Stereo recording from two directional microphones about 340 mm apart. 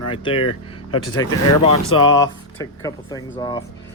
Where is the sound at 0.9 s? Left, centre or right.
Left.